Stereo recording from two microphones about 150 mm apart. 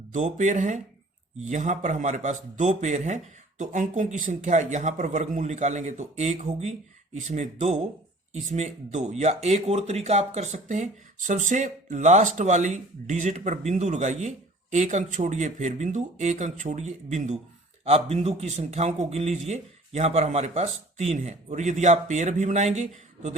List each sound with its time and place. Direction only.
0.1 s speech: 55° right (ahead or behind)